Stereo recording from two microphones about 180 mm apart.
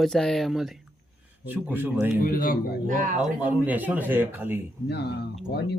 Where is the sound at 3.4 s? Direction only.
10° right (ahead or behind).